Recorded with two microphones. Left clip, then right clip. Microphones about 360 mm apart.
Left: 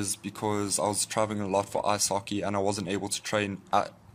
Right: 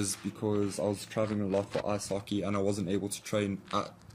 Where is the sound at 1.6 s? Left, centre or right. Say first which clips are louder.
Left 6 dB; left.